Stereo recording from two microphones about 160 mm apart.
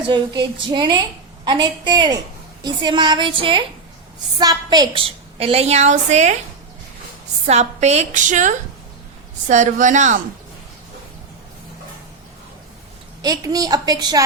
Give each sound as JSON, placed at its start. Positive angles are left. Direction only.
{"t": 0.1, "sound": "a woman's voice", "side_deg": -30}
{"t": 7.4, "sound": "a woman's voice", "side_deg": -45}
{"t": 13.2, "sound": "a woman's voice", "side_deg": -25}